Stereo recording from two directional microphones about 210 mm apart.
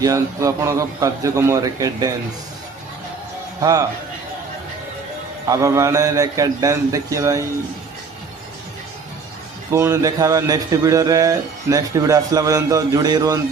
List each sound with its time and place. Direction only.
0.0 s a man's voice: 15° right (ahead or behind)
3.6 s a man's voice: 15° right (ahead or behind)
5.5 s a man's voice: 15° right (ahead or behind)
9.7 s a man's voice: 15° right (ahead or behind)